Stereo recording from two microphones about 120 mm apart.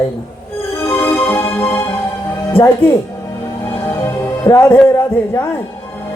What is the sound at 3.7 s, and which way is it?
Music, 20° left (ahead or behind).